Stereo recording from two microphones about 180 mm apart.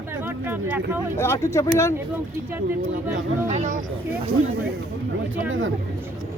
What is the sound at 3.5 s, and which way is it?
Speech, 45° right (ahead or behind).